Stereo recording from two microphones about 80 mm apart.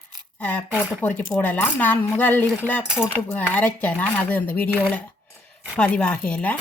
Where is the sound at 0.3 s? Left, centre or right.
Left.